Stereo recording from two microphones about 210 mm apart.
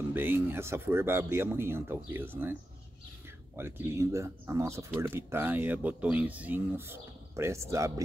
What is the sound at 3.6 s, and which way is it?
Speech, 10° right (ahead or behind).